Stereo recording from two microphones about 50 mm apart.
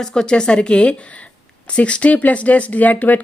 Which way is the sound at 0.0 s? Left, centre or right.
Centre.